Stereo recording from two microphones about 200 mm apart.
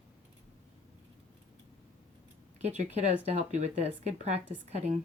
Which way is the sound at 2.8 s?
35° right (ahead or behind).